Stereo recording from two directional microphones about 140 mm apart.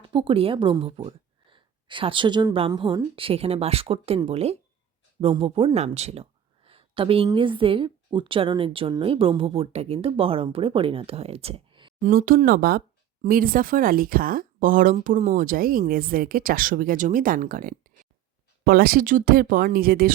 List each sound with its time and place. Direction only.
0.1 s speech: 35° right (ahead or behind)
6.7 s a sound: 40° right (ahead or behind)
7.3 s speech: 35° right (ahead or behind)
11.9 s speech: 90° right
18.6 s speech: 90° right